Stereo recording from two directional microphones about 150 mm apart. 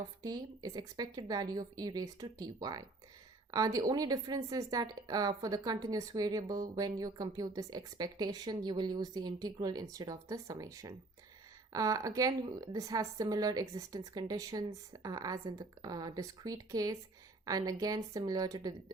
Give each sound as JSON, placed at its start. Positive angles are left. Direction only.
{"t": 0.2, "sound": "a woman's voice", "side_deg": -25}